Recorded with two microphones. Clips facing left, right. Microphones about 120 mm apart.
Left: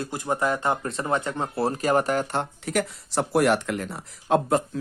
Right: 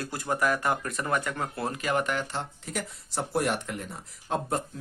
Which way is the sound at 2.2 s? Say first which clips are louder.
Left 7 dB; 65° left (ahead or behind).